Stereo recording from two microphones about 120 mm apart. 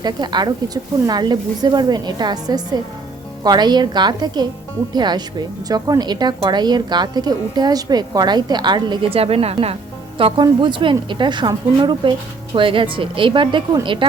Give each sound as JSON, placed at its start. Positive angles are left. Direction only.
{"t": 0.0, "sound": "speech", "side_deg": -35}
{"t": 9.1, "sound": "a woman's voice", "side_deg": -55}